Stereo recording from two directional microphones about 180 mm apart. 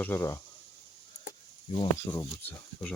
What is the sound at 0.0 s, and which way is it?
Speech, 10° left (ahead or behind).